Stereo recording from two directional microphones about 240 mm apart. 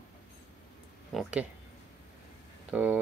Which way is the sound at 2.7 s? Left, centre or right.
Centre.